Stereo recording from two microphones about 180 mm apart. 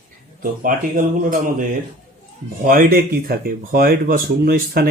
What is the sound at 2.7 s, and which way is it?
Speech, 55° right (ahead or behind).